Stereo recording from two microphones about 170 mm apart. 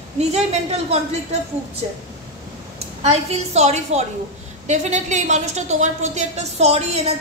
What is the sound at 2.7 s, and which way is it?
A woman's voice, 40° right (ahead or behind).